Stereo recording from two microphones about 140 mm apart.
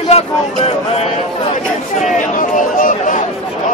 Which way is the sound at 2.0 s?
65° left (ahead or behind).